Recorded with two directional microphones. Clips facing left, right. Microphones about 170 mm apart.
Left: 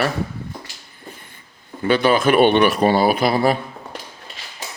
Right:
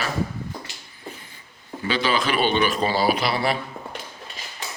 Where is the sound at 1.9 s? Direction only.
55° left (ahead or behind).